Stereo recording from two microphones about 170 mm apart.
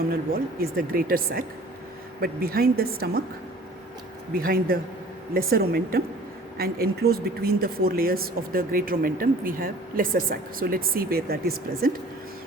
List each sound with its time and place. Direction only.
0.1 s speech: 60° right (ahead or behind)
4.4 s speech: 60° right (ahead or behind)